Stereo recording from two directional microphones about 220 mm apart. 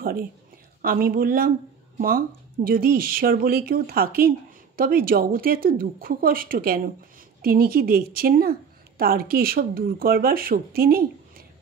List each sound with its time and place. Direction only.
0.8 s a woman's voice: 40° right (ahead or behind)